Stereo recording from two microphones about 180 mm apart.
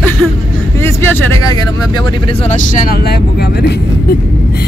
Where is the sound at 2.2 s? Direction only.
40° left (ahead or behind); by 3.8 s 60° left (ahead or behind).